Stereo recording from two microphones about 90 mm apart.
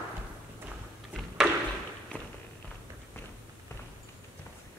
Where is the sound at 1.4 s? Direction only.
15° right (ahead or behind).